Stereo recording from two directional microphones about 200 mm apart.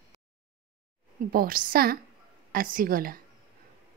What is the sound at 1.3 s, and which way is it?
A woman's voice, 45° right (ahead or behind).